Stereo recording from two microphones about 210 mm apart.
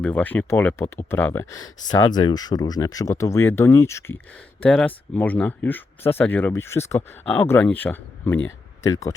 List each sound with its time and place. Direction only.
0.0 s speech: 10° left (ahead or behind)